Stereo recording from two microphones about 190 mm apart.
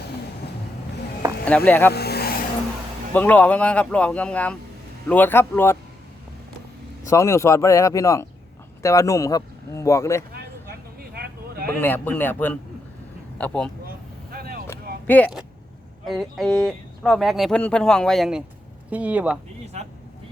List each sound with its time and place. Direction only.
1.5 s speech: 10° left (ahead or behind)
1.9 s vehicle: 60° left (ahead or behind)
3.1 s speech: 10° left (ahead or behind)
7.1 s speech: 15° left (ahead or behind)
10.3 s vehicle: 55° right (ahead or behind)
11.7 s speech: 10° left (ahead or behind)
13.8 s vehicle: 50° right (ahead or behind)
15.0 s speech: 10° left (ahead or behind); by 19.4 s 5° right (ahead or behind)
19.6 s speech: 35° right (ahead or behind)